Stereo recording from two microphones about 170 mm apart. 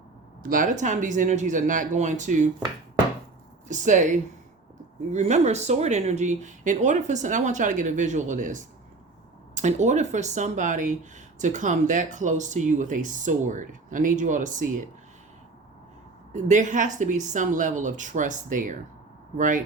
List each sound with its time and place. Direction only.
0.4 s speech: 50° right (ahead or behind)
3.7 s speech: 45° right (ahead or behind)
5.1 s speech: 40° right (ahead or behind)
16.3 s speech: 45° right (ahead or behind)